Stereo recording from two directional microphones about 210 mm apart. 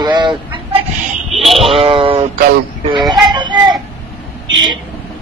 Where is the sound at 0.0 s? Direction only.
20° right (ahead or behind).